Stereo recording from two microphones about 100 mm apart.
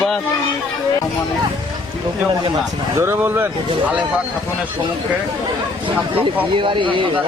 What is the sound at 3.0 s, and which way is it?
Speech, 25° right (ahead or behind).